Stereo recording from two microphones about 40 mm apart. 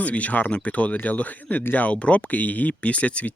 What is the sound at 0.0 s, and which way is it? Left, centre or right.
Speech, left.